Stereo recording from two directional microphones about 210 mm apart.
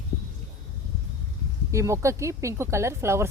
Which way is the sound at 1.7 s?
15° right (ahead or behind).